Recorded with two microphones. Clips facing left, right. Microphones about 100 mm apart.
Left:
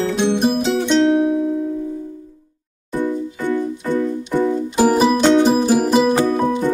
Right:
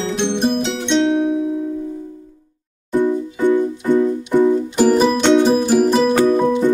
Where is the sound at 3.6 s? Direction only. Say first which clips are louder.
Right 4 dB; 20° right (ahead or behind).